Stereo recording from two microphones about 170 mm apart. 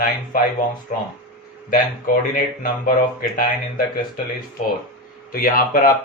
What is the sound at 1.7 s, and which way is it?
Speech, 55° left (ahead or behind).